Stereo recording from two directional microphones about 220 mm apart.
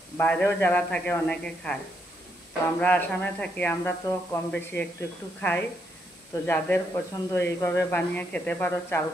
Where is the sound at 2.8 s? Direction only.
5° left (ahead or behind).